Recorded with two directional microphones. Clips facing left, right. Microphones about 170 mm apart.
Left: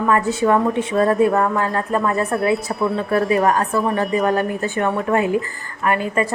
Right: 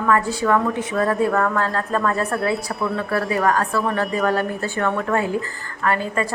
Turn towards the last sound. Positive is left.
turn(degrees=15)  # may be behind; listen again after turning